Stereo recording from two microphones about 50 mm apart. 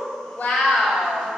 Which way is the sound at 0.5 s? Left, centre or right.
Centre.